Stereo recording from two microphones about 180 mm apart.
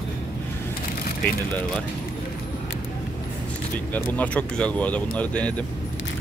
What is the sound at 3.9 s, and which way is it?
Speech, 10° left (ahead or behind).